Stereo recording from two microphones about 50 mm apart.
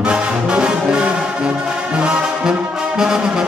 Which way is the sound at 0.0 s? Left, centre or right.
Right.